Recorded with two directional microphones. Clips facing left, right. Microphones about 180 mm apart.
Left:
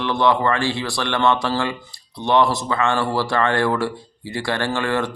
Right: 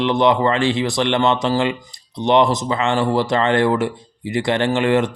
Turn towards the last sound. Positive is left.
turn(degrees=-20)  # may be behind; listen again after turning